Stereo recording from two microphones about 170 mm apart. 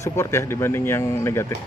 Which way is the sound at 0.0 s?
15° left (ahead or behind).